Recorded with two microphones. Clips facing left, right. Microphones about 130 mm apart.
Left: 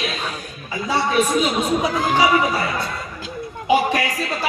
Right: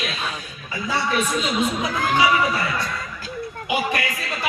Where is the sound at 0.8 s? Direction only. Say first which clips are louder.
Left 4 dB; 30° left (ahead or behind).